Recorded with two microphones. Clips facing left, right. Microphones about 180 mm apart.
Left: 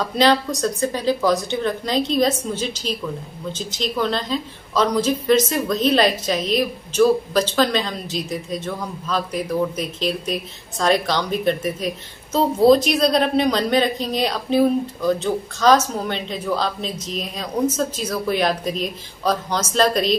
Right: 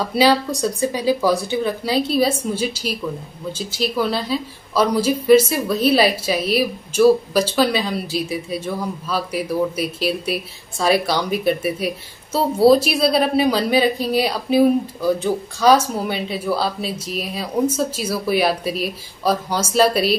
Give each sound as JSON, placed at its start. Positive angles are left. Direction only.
{"t": 0.0, "sound": "a woman's voice", "side_deg": -10}